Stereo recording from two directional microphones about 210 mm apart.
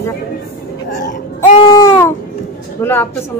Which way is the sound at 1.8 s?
15° left (ahead or behind).